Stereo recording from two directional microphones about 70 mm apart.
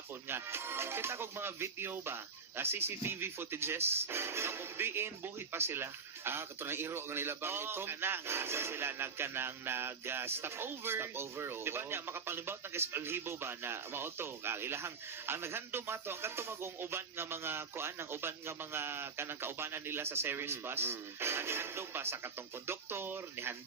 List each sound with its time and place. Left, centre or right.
0.3 s speech: right